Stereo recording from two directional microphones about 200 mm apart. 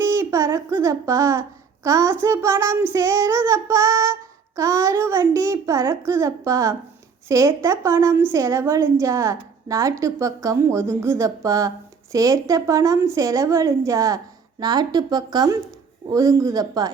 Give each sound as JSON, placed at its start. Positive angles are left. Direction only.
{"t": 0.0, "sound": "speech", "side_deg": -15}